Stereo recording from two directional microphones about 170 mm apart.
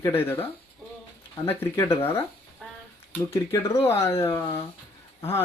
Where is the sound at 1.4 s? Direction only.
15° left (ahead or behind).